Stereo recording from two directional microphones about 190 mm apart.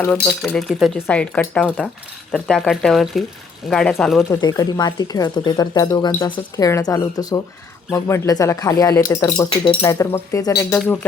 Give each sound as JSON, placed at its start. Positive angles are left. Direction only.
{"t": 0.0, "sound": "speech", "side_deg": 15}
{"t": 0.4, "sound": "speech", "side_deg": 0}
{"t": 4.3, "sound": "speech", "side_deg": 20}
{"t": 10.7, "sound": "speech", "side_deg": 10}